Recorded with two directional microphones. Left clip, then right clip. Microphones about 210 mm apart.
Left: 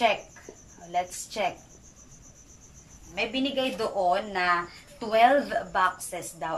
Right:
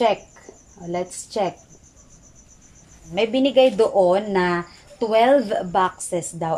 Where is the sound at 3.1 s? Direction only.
40° right (ahead or behind).